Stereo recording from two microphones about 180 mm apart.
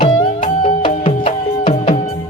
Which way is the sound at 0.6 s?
30° left (ahead or behind).